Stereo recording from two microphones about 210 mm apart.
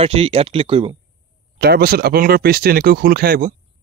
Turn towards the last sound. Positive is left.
turn(degrees=-40)  # may be behind; listen again after turning